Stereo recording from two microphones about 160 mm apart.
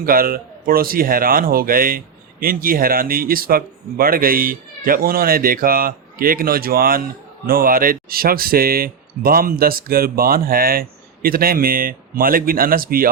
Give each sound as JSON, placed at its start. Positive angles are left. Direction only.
{"t": 0.0, "sound": "speech", "side_deg": -65}